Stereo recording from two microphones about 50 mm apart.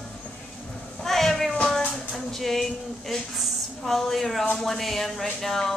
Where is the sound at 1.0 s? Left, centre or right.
Centre.